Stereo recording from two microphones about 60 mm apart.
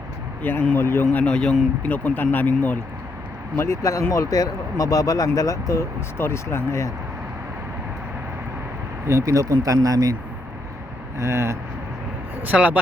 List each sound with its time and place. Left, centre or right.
0.4 s a man's voice: left
1.1 s a man's voice: centre
1.8 s speech: left
3.6 s speech: left
4.1 s speech: left
6.1 s speech: left
9.0 s speech: right
11.2 s speech: right
12.4 s speech: right